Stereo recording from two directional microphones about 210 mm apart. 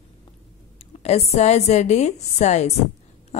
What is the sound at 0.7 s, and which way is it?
A woman's voice, 30° left (ahead or behind).